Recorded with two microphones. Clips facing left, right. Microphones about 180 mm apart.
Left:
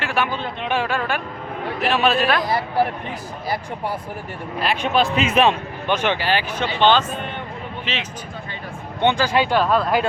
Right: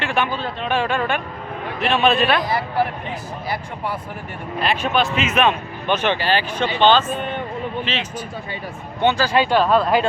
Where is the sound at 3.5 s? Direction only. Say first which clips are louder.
Left 2 dB; 40° left (ahead or behind).